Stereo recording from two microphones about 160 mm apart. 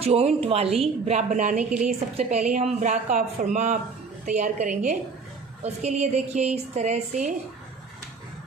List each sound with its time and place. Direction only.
0.0 s a woman's voice: 40° right (ahead or behind)